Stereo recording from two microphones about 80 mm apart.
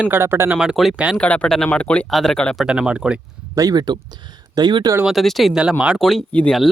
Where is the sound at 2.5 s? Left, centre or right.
Centre.